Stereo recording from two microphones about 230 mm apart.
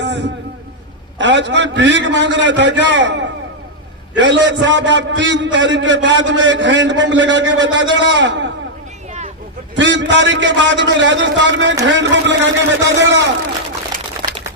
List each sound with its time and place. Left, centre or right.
0.0 s a sound: right
1.2 s a man's voice: right
9.7 s a man's voice: right